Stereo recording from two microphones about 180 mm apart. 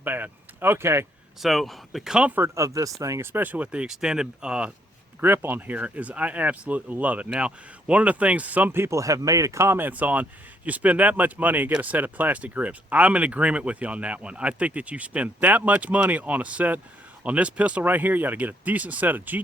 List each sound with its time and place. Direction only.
0.0 s speech: 10° right (ahead or behind)
1.4 s speech: centre (ahead or behind)